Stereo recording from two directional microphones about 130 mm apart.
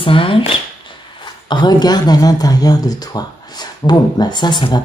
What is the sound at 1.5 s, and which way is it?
Speech, 35° left (ahead or behind).